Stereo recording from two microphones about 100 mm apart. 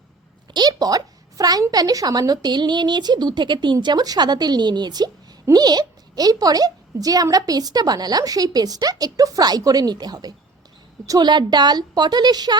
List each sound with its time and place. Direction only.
0.5 s a sound: 45° right (ahead or behind)
1.7 s speech: 40° right (ahead or behind)
11.3 s speech: 50° right (ahead or behind)